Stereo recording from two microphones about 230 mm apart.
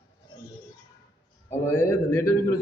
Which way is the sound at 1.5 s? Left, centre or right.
Centre.